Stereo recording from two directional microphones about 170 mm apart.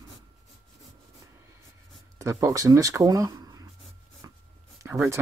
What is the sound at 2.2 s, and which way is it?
Speech, 20° right (ahead or behind).